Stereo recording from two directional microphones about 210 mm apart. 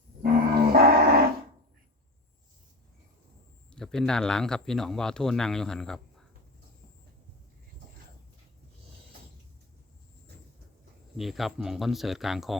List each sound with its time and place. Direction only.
0.2 s livestock: 45° right (ahead or behind)
3.7 s speech: 5° left (ahead or behind)
11.2 s speech: centre (ahead or behind)